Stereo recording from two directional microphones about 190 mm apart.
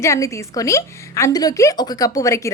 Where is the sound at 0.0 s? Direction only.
15° left (ahead or behind).